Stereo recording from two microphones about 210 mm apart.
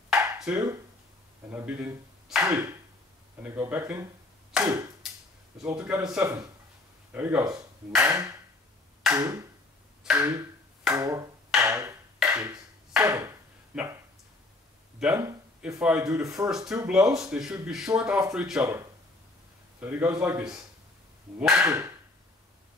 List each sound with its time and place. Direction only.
0.1 s a sound: 5° right (ahead or behind)
1.5 s speech: 10° right (ahead or behind)
11.5 s a sound: 15° right (ahead or behind)
13.7 s speech: 5° right (ahead or behind)
15.0 s speech: 10° right (ahead or behind)
19.8 s speech: 10° right (ahead or behind)